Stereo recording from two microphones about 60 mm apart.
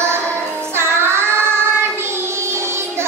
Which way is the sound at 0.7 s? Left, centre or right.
Right.